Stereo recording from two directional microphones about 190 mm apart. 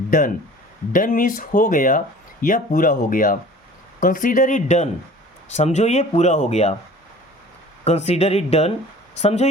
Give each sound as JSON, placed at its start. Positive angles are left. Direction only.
{"t": 0.1, "sound": "speech", "side_deg": 45}
{"t": 7.9, "sound": "speech", "side_deg": 35}